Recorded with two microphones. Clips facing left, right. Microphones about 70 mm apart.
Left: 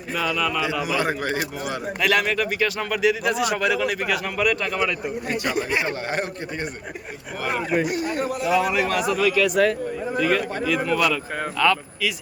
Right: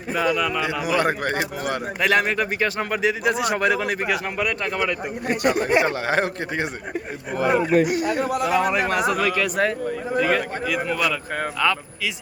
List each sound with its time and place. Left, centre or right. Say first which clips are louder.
0.1 s speech: right 2 dB; right
0.9 s speech: right 2 dB; right
2.0 s a man's voice: right 1 dB; right
5.4 s speech: right 6 dB; right
5.9 s a man's voice: right 4 dB; right
7.9 s a man's voice: right 2 dB; right
8.4 s a man's voice: left 2 dB; right
10.2 s speech: right 1 dB; right
10.7 s a man's voice: left 3 dB; centre